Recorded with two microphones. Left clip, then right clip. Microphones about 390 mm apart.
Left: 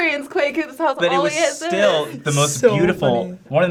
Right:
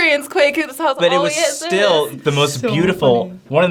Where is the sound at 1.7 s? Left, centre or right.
Right.